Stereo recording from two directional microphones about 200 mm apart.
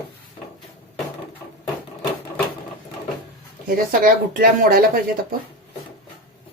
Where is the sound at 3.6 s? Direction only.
45° right (ahead or behind).